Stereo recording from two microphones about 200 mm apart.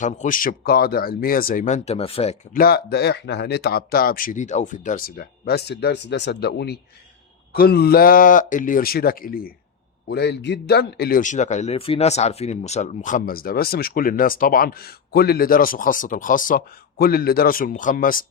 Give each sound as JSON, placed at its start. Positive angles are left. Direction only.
{"t": 0.0, "sound": "speech", "side_deg": 40}
{"t": 2.5, "sound": "speech", "side_deg": 50}